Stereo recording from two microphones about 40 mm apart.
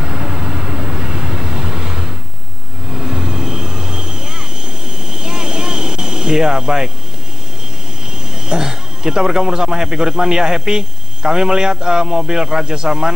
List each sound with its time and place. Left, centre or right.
0.0 s vehicle: centre
5.1 s a sound: centre
8.5 s speech: centre